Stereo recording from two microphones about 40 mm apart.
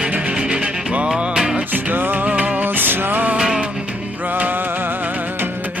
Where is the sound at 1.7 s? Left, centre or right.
Right.